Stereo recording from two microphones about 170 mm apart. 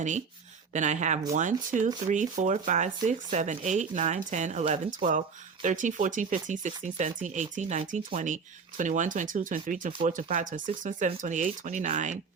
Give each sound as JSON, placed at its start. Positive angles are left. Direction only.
{"t": 0.7, "sound": "speech", "side_deg": -45}